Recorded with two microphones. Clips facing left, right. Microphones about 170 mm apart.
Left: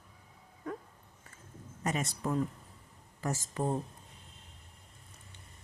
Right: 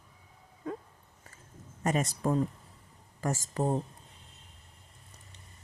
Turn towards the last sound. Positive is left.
turn(degrees=-40)  # may be behind; listen again after turning